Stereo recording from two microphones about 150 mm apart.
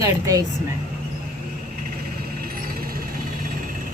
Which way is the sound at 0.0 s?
20° right (ahead or behind).